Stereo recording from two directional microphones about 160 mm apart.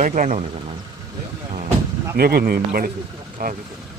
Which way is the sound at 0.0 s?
50° right (ahead or behind).